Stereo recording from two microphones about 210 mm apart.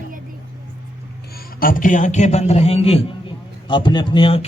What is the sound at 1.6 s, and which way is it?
A man's voice, 40° left (ahead or behind).